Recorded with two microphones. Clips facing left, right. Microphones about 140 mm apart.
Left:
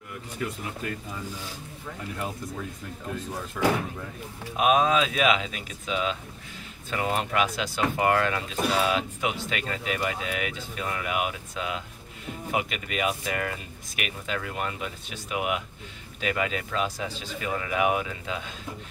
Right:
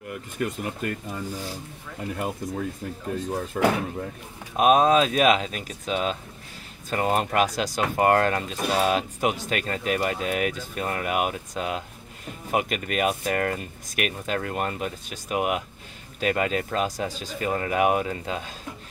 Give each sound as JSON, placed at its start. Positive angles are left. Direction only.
{"t": 0.4, "sound": "speech", "side_deg": -60}
{"t": 2.1, "sound": "speech", "side_deg": -50}